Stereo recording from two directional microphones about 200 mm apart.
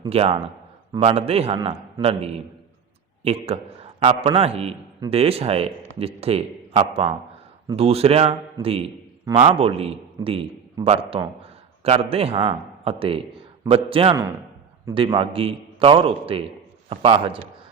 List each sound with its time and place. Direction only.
0.0 s a man's voice: 30° right (ahead or behind)